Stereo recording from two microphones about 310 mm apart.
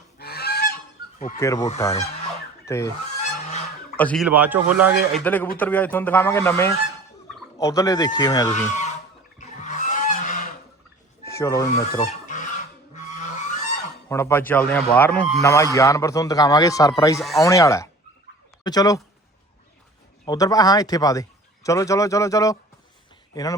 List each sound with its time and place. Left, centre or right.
0.2 s goose: left
1.4 s speech: centre
2.6 s fowl: centre
3.9 s speech: centre
9.4 s a sound: left
11.3 s speech: centre
12.0 s fowl: left
13.0 s a sound: left
14.1 s speech: centre
17.2 s speech: centre
20.2 s speech: centre